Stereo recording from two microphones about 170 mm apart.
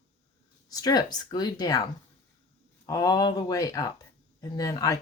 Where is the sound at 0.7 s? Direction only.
20° left (ahead or behind).